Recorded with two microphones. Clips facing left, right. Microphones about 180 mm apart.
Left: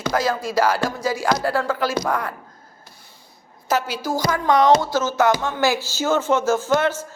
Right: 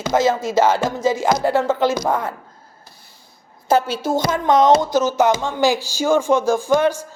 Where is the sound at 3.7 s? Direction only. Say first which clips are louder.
Right 5 dB; 30° right (ahead or behind); by 7.1 s 15° right (ahead or behind).